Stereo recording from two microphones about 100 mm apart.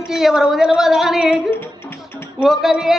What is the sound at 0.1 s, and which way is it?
Speech, 5° right (ahead or behind).